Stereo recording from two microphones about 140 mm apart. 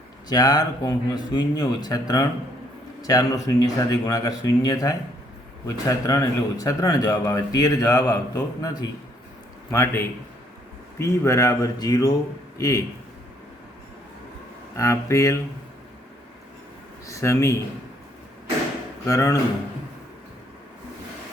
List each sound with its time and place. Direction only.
0.3 s a man's voice: 30° left (ahead or behind)
9.7 s a man's voice: 15° left (ahead or behind)
14.8 s a man's voice: 20° left (ahead or behind)
17.1 s a man's voice: 20° left (ahead or behind)
19.0 s a man's voice: 25° left (ahead or behind)